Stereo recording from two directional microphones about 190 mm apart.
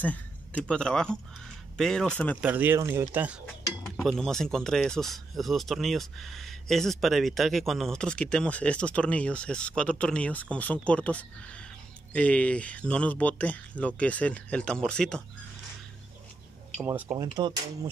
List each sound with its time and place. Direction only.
0.0 s speech: 10° left (ahead or behind)
2.4 s speech: 10° right (ahead or behind)
3.9 s speech: 5° left (ahead or behind)
16.8 s speech: 10° right (ahead or behind)
17.4 s speech: 20° right (ahead or behind)